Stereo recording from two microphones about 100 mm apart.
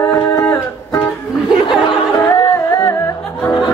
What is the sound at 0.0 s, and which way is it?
Music, 30° left (ahead or behind).